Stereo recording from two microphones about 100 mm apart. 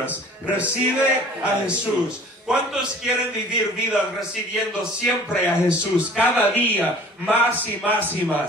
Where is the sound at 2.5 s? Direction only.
5° right (ahead or behind).